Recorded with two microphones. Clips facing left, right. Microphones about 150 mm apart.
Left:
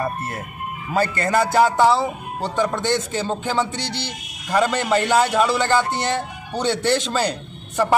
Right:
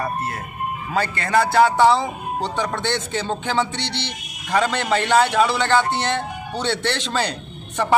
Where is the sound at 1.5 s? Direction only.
10° left (ahead or behind).